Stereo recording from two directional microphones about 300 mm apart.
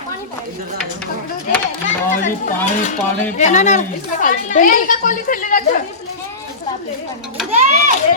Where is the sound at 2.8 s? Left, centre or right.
Left.